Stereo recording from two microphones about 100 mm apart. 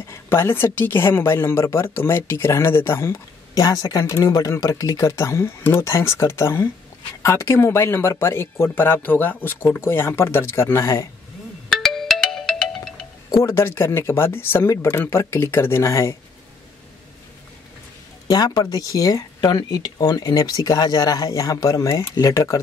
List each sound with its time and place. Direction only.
0.1 s a woman's voice: 25° left (ahead or behind)
11.7 s music: 5° left (ahead or behind)
13.5 s a woman's voice: 25° left (ahead or behind)
18.3 s speech: 45° left (ahead or behind)